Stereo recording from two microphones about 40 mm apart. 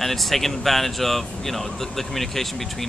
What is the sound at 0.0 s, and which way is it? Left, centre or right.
Speech, centre.